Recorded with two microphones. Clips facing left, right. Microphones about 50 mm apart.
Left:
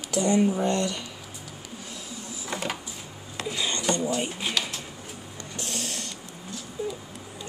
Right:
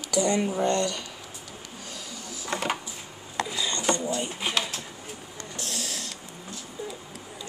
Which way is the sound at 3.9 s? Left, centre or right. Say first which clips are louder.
Left 2 dB; left.